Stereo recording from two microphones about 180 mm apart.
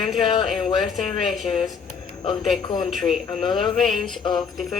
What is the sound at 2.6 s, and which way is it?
Speech, 25° left (ahead or behind).